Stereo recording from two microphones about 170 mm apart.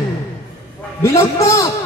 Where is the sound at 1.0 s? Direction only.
15° left (ahead or behind).